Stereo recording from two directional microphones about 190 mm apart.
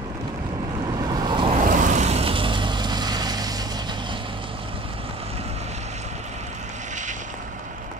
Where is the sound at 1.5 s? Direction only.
40° right (ahead or behind).